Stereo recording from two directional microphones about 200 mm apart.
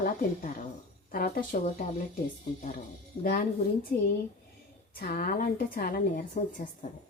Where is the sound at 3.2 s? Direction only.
45° left (ahead or behind).